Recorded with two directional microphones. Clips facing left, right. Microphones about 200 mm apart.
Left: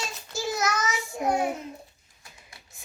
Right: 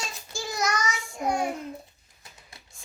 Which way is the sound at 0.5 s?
5° left (ahead or behind).